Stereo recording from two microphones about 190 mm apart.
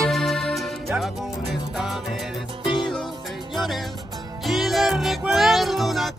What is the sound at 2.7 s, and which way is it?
Music, 25° left (ahead or behind).